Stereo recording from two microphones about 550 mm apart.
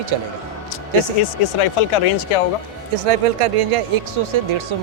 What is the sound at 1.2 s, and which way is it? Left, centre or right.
Speech, left.